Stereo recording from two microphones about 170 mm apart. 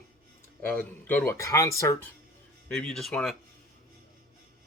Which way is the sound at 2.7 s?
5° left (ahead or behind).